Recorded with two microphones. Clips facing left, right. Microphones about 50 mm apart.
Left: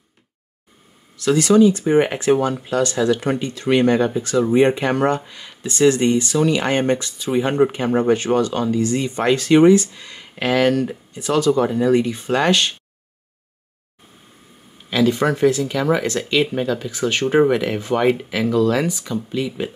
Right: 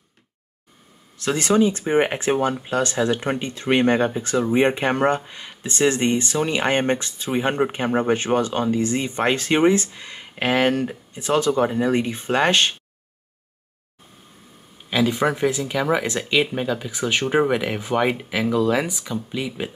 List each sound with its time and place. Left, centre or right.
1.1 s speech: right
14.9 s speech: centre